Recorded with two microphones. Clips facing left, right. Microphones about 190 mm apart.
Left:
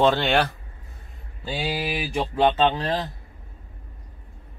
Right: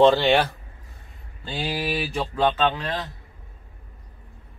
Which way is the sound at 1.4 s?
10° left (ahead or behind).